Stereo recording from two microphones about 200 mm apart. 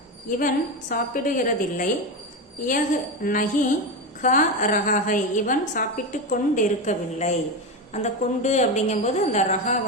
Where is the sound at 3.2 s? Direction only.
40° left (ahead or behind).